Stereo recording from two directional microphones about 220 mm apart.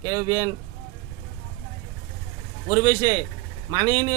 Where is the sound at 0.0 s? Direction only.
20° right (ahead or behind).